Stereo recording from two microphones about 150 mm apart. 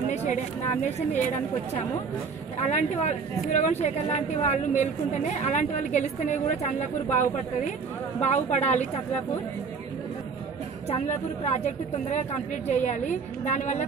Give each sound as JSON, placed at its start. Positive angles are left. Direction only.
{"t": 1.1, "sound": "speech", "side_deg": 55}
{"t": 2.6, "sound": "speech", "side_deg": 50}
{"t": 11.1, "sound": "speech", "side_deg": 50}